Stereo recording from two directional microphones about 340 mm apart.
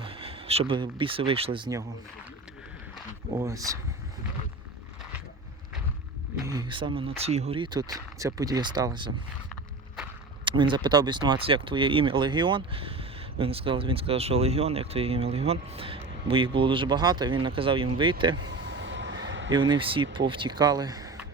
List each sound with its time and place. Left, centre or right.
0.0 s speech: centre
3.3 s speech: centre
6.3 s speech: centre
10.4 s speech: centre
18.5 s vehicle: right
19.5 s speech: centre